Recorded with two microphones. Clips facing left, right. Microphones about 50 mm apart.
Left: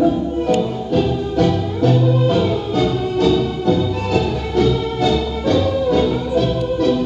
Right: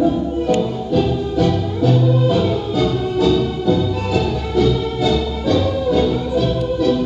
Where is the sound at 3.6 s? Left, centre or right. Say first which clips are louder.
Even; left.